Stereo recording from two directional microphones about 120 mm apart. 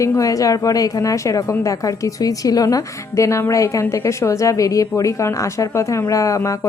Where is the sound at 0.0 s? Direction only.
25° left (ahead or behind).